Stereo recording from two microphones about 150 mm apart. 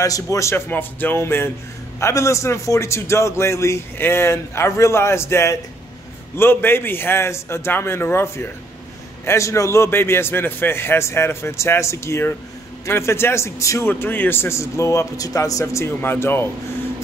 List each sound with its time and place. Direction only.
0.0 s a man's voice: 20° left (ahead or behind)